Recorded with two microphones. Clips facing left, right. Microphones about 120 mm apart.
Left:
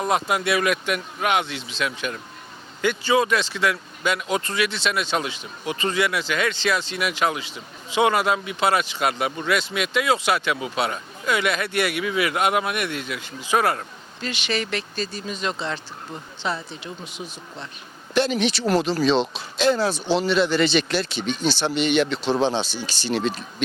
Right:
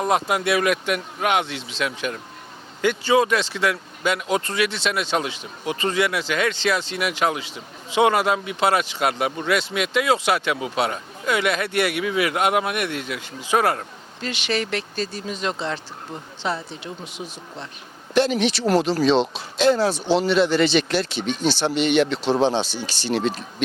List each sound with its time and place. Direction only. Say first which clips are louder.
0.1 s speech: right 1 dB; 50° right (ahead or behind)
18.1 s speech: right 2 dB; 60° right (ahead or behind)